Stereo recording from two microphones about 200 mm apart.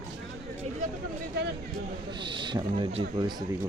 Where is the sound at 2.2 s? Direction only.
25° right (ahead or behind).